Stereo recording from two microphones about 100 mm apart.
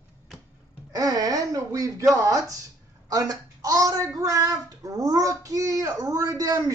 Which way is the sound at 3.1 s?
40° right (ahead or behind).